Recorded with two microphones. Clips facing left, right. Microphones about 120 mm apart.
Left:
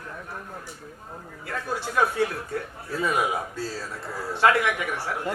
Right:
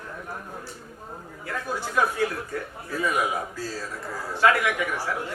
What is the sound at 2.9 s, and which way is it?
A man's voice, 25° left (ahead or behind).